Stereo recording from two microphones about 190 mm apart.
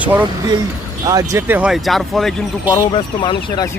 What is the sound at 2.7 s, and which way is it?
Speech, 20° left (ahead or behind).